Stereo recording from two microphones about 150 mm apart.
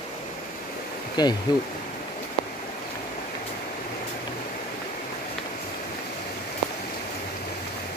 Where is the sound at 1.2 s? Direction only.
25° left (ahead or behind).